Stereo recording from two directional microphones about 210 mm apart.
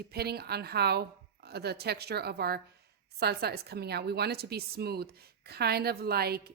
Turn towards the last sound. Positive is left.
turn(degrees=-50)  # may be behind; listen again after turning